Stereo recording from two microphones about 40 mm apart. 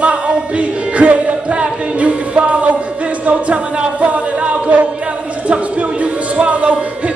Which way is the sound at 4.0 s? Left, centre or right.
Right.